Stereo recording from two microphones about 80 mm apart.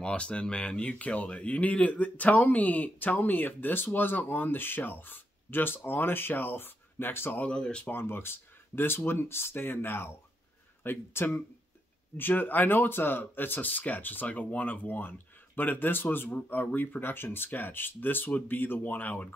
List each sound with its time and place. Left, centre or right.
0.0 s speech: centre
7.5 s speech: centre
7.9 s speech: left